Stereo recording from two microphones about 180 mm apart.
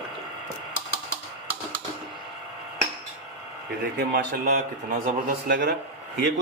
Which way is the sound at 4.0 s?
55° right (ahead or behind).